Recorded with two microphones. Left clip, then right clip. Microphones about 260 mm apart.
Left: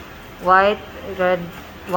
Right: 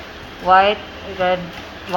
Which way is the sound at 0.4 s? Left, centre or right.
Left.